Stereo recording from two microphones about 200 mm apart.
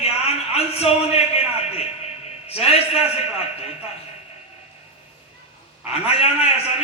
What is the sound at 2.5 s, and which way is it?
Speech, 30° left (ahead or behind).